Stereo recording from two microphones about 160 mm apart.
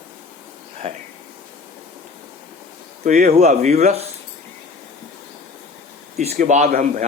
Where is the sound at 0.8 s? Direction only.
40° right (ahead or behind).